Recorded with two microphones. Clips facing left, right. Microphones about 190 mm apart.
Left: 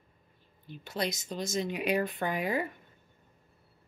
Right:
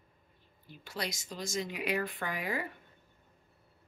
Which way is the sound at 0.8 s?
20° left (ahead or behind).